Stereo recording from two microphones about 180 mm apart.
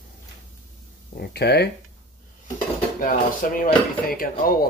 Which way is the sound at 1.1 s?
65° left (ahead or behind).